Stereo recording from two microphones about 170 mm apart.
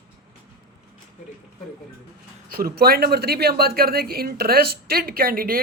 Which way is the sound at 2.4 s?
60° right (ahead or behind).